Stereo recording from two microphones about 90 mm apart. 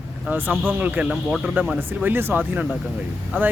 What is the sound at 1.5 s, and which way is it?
Speech, 15° right (ahead or behind).